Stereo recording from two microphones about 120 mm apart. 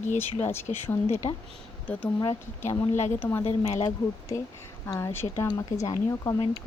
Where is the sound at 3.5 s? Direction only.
65° left (ahead or behind).